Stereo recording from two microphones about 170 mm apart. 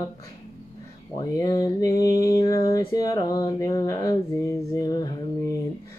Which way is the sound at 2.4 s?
20° left (ahead or behind).